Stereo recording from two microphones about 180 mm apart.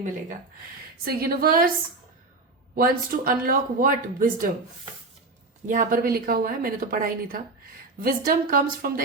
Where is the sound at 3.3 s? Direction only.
50° right (ahead or behind).